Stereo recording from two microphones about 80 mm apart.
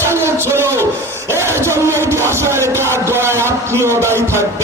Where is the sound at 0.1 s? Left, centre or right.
Right.